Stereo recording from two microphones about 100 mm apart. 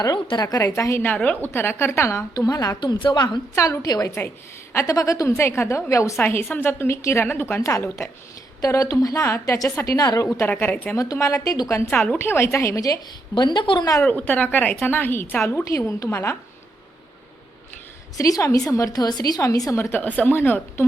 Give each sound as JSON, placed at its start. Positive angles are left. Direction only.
{"t": 0.4, "sound": "a woman's voice", "side_deg": 35}
{"t": 1.1, "sound": "a woman's voice", "side_deg": 15}
{"t": 3.5, "sound": "a woman's voice", "side_deg": 35}
{"t": 10.0, "sound": "a woman's voice", "side_deg": 40}
{"t": 10.4, "sound": "a woman's voice", "side_deg": 20}
{"t": 10.9, "sound": "a woman's voice", "side_deg": 35}
{"t": 11.9, "sound": "a woman's voice", "side_deg": 15}
{"t": 13.3, "sound": "speech", "side_deg": 50}
{"t": 14.1, "sound": "a woman's voice", "side_deg": 15}
{"t": 18.2, "sound": "a woman's voice", "side_deg": 35}
{"t": 20.0, "sound": "a woman's voice", "side_deg": 15}